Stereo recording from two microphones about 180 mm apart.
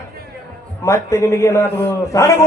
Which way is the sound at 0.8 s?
15° left (ahead or behind).